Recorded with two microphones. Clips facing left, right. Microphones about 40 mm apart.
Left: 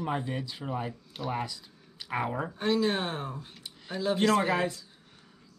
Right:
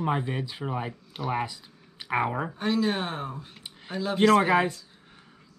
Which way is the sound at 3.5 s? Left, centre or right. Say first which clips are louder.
Right 2 dB; centre.